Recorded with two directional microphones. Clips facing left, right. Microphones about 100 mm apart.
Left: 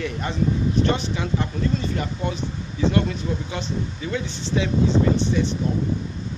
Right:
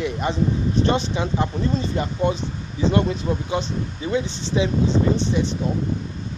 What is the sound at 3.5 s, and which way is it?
Speech, 20° right (ahead or behind).